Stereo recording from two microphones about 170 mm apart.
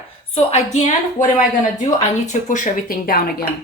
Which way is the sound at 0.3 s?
40° left (ahead or behind).